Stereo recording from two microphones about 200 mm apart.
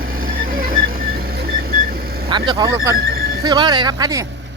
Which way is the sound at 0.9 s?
45° right (ahead or behind).